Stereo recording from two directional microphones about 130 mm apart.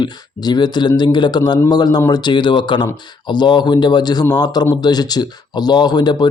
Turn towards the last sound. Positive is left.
turn(degrees=30)  # may be behind; listen again after turning